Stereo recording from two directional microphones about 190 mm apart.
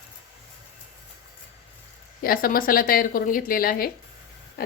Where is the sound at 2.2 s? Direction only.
50° left (ahead or behind).